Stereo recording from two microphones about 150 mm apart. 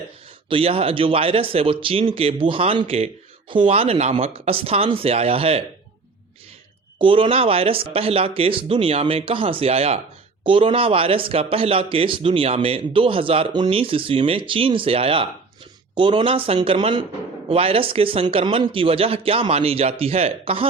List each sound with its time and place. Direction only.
0.4 s speech: 40° right (ahead or behind)
7.0 s speech: 35° right (ahead or behind)